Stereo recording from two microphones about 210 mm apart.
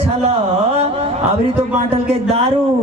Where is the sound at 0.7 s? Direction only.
30° right (ahead or behind).